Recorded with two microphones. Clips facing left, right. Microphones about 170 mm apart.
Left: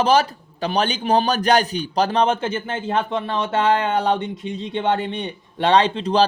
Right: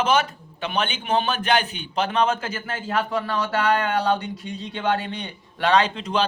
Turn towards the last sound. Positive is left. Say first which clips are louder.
# left 4 dB
turn(degrees=35)  # may be behind; listen again after turning